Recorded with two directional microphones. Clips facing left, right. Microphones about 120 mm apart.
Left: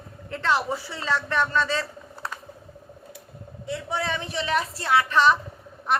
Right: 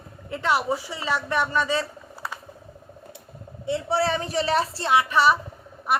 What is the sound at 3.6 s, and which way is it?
A woman's voice, 30° right (ahead or behind).